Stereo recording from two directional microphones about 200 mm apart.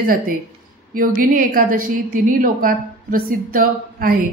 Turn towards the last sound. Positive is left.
turn(degrees=-45)  # may be behind; listen again after turning